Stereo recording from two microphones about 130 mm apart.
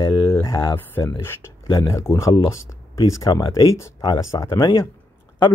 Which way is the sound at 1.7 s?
35° left (ahead or behind).